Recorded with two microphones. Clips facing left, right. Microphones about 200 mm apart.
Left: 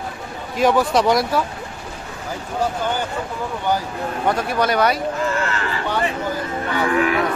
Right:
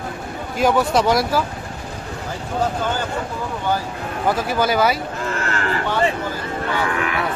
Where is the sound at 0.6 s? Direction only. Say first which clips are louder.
Left 1 dB; centre (ahead or behind).